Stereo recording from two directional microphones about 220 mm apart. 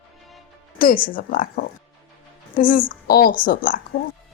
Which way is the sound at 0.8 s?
40° left (ahead or behind).